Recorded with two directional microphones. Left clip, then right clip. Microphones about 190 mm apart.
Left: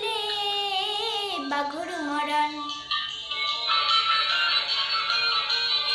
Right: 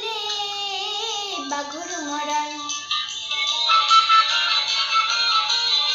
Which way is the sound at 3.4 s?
40° right (ahead or behind).